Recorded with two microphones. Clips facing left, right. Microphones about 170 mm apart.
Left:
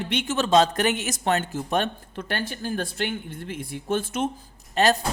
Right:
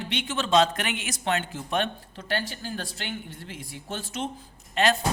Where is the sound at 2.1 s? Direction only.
55° left (ahead or behind).